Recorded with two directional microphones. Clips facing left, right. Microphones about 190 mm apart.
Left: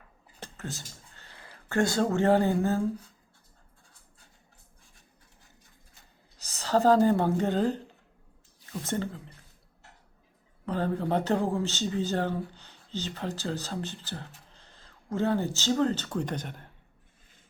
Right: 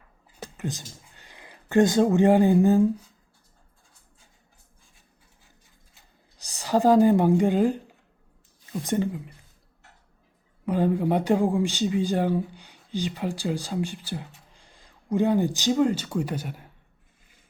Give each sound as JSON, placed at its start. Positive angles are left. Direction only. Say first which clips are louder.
{"t": 0.5, "sound": "speech", "louder": "right 7 dB", "side_deg": -15}
{"t": 6.4, "sound": "a man's voice", "louder": "right 2 dB", "side_deg": -15}
{"t": 10.7, "sound": "a man's voice", "louder": "right 5 dB", "side_deg": -15}